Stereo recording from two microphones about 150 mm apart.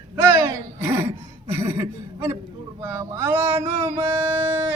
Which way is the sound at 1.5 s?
20° right (ahead or behind).